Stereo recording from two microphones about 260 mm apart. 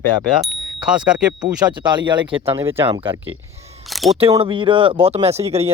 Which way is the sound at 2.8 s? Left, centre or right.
Centre.